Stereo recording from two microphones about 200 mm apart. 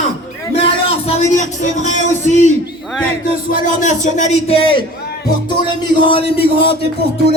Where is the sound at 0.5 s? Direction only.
30° left (ahead or behind).